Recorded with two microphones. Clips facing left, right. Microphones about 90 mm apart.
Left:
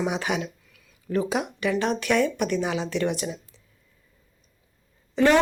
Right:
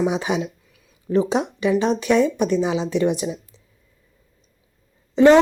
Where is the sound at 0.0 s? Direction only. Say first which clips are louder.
Right 5 dB; 20° right (ahead or behind).